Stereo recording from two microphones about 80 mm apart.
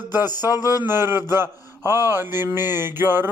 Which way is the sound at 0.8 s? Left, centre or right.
Right.